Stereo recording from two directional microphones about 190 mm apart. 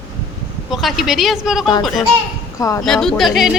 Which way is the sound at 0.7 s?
Centre (ahead or behind).